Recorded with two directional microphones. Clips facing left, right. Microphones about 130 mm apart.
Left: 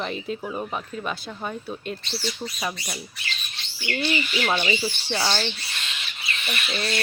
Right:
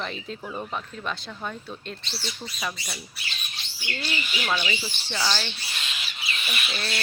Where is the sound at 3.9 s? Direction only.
20° left (ahead or behind).